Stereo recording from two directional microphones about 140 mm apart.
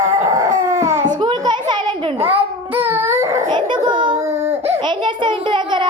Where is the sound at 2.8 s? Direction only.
15° right (ahead or behind).